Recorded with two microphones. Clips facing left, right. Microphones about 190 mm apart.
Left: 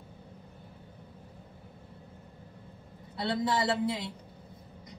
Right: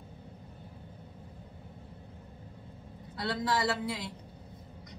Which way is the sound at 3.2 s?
25° left (ahead or behind).